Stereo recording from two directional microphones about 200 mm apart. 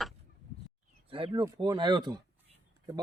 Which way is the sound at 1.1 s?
25° right (ahead or behind).